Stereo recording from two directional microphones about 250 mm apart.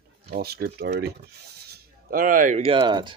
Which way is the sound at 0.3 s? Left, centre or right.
Right.